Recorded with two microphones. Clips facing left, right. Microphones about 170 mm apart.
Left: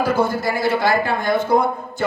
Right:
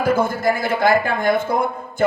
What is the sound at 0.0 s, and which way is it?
A man's voice, 50° right (ahead or behind).